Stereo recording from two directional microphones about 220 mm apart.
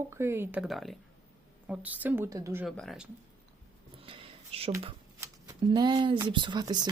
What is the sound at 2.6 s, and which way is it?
Speech, centre (ahead or behind).